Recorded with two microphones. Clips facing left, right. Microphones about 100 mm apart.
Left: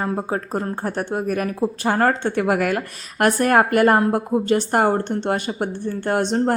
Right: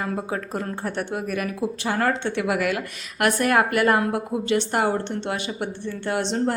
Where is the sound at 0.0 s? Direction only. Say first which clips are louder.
Left 4 dB; 35° left (ahead or behind).